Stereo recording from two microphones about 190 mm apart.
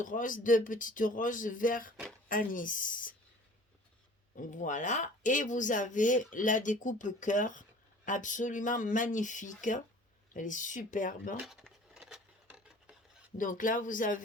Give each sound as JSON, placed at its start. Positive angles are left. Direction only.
{"t": 0.0, "sound": "speech", "side_deg": 45}
{"t": 4.4, "sound": "speech", "side_deg": 40}
{"t": 11.4, "sound": "filing", "side_deg": 0}
{"t": 13.3, "sound": "speech", "side_deg": 45}